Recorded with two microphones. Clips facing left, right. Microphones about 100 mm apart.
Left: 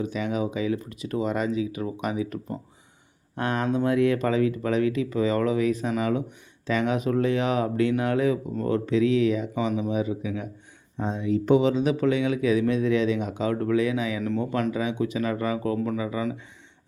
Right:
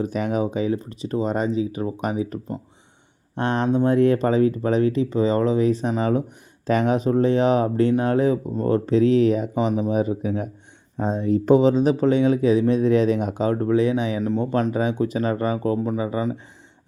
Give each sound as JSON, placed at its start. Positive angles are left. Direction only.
{"t": 0.0, "sound": "speech", "side_deg": -45}
{"t": 3.9, "sound": "speech", "side_deg": -35}
{"t": 13.4, "sound": "speech", "side_deg": -30}
{"t": 14.7, "sound": "speech", "side_deg": -40}